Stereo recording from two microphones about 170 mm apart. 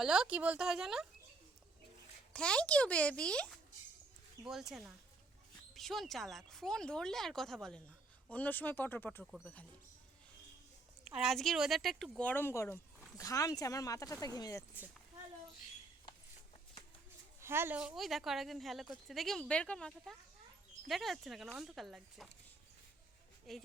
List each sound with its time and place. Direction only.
0.0 s speech: 5° right (ahead or behind)
2.3 s a child's voice: 5° left (ahead or behind)
9.2 s speech: centre (ahead or behind)
11.0 s speech: 5° right (ahead or behind); by 14.6 s 20° left (ahead or behind)
17.4 s speech: 15° right (ahead or behind)
23.5 s speech: centre (ahead or behind)